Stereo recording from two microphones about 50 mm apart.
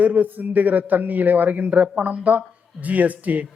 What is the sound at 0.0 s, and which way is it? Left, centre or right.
A man's voice, right.